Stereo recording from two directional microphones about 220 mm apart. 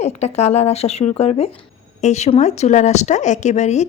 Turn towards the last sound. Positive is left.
turn(degrees=30)  # may be behind; listen again after turning